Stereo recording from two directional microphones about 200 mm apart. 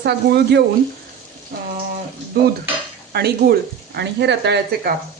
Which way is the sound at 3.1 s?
55° right (ahead or behind).